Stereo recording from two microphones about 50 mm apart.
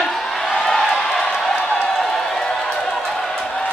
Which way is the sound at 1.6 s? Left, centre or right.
Left.